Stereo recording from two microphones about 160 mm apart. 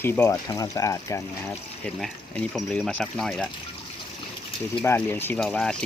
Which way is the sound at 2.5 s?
Centre (ahead or behind).